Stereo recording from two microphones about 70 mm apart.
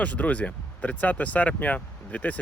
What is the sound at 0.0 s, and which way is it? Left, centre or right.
Speech, left.